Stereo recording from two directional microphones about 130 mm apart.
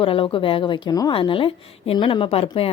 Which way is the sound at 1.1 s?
40° left (ahead or behind).